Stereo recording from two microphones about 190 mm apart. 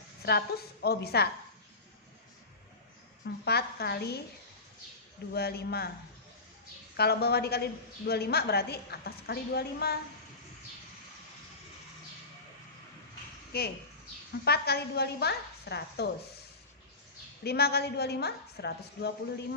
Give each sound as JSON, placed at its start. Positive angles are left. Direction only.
{"t": 0.3, "sound": "a woman's voice", "side_deg": 55}
{"t": 3.2, "sound": "a woman's voice", "side_deg": 55}
{"t": 5.3, "sound": "a woman's voice", "side_deg": 55}
{"t": 6.9, "sound": "a woman's voice", "side_deg": 55}
{"t": 13.5, "sound": "a woman's voice", "side_deg": 55}
{"t": 17.4, "sound": "a woman's voice", "side_deg": 55}